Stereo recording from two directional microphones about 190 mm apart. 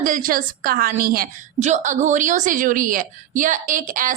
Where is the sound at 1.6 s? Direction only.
40° right (ahead or behind).